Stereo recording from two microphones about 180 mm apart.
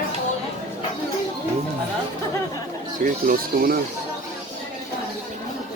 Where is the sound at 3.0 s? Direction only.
50° right (ahead or behind).